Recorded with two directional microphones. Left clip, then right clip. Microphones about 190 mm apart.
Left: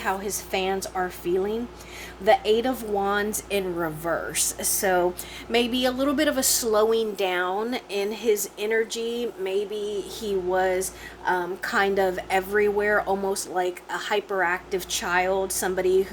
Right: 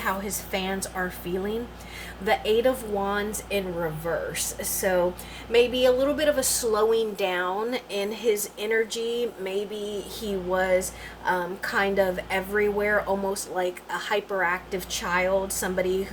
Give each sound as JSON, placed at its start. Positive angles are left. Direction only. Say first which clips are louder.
{"t": 0.0, "sound": "a woman's voice", "louder": "left 1 dB", "side_deg": 45}